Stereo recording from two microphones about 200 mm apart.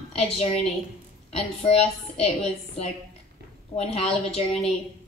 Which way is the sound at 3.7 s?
30° left (ahead or behind).